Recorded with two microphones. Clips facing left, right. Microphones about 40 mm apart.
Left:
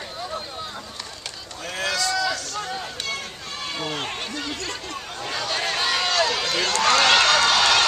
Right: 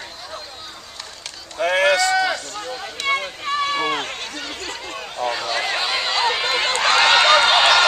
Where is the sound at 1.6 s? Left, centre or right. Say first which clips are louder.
Right 10 dB; right.